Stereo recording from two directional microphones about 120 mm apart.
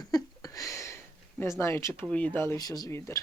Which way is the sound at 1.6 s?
25° left (ahead or behind).